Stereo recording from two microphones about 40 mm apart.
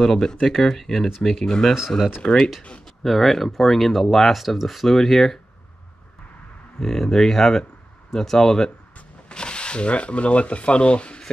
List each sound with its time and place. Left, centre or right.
0.0 s speech: centre
6.8 s speech: centre; by 11.2 s left